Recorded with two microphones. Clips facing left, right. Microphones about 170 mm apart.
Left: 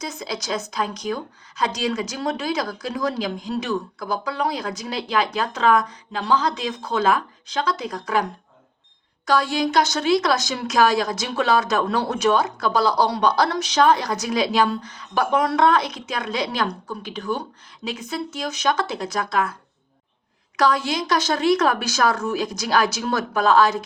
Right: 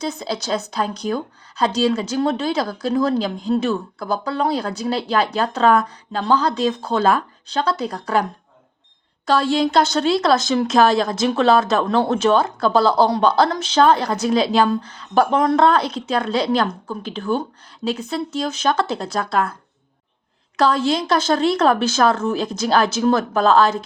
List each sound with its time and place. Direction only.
0.0 s speech: 30° right (ahead or behind)
9.3 s speech: 30° right (ahead or behind)
20.6 s speech: 30° right (ahead or behind)